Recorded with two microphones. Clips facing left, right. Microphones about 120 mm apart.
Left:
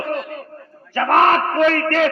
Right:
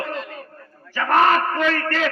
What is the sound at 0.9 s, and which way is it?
Speech, 45° left (ahead or behind).